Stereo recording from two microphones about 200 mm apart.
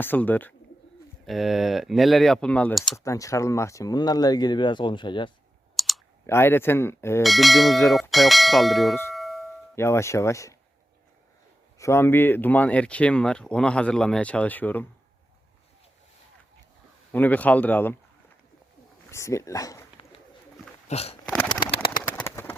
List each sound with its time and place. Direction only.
0.0 s speech: 10° left (ahead or behind)
3.0 s speech: 15° left (ahead or behind)
5.7 s clicking: centre (ahead or behind)
6.2 s speech: 10° left (ahead or behind)
7.2 s speech: centre (ahead or behind)
9.1 s a sound: centre (ahead or behind)
9.7 s speech: 15° left (ahead or behind)
11.8 s speech: 15° left (ahead or behind)
17.1 s speech: 10° left (ahead or behind)
19.1 s speech: 15° left (ahead or behind)
20.8 s a sound: 30° left (ahead or behind)
21.2 s a sound: 5° left (ahead or behind)